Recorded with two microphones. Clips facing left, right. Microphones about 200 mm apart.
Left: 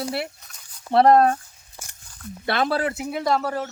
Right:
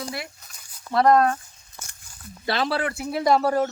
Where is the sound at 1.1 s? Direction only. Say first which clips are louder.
Left 1 dB; 30° left (ahead or behind).